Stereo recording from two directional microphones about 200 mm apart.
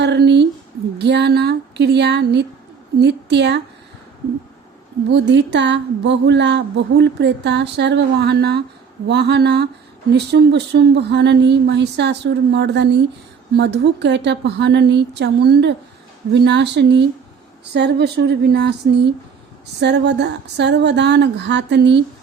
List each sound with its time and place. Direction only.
0.0 s a sound: 60° right (ahead or behind)
3.0 s speech: 55° right (ahead or behind)
5.0 s speech: 60° right (ahead or behind)
19.8 s speech: 60° right (ahead or behind)